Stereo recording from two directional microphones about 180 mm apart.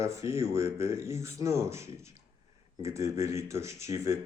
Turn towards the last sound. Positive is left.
turn(degrees=-15)  # may be behind; listen again after turning